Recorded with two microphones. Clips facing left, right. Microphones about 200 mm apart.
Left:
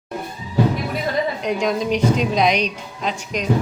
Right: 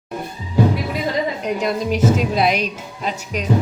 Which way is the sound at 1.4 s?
5° right (ahead or behind).